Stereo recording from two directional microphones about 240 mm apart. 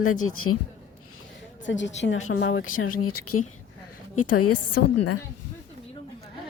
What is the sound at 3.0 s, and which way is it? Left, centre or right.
A woman's voice, left.